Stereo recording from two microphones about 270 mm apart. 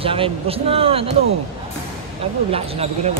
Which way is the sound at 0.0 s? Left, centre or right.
Centre.